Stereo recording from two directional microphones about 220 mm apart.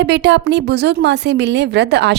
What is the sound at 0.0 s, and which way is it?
A woman's voice, 50° right (ahead or behind).